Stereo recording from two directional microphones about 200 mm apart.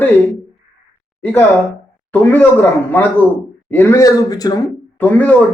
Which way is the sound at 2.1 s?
10° left (ahead or behind).